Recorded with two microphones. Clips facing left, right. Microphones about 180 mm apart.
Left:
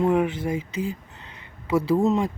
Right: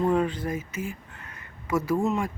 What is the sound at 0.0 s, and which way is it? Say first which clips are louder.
Speech: left 3 dB; 10° left (ahead or behind).